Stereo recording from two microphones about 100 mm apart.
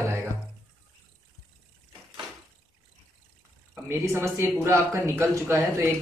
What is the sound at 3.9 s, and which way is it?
A man's voice, 30° right (ahead or behind).